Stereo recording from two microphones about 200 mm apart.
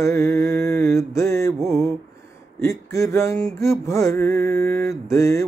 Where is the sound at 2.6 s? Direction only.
15° left (ahead or behind).